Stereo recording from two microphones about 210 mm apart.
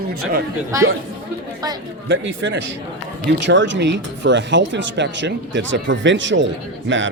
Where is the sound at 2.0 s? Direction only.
65° right (ahead or behind).